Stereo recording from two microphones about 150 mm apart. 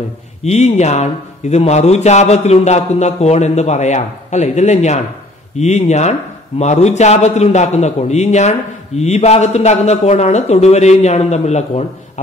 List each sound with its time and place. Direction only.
0.4 s a man's voice: 45° left (ahead or behind)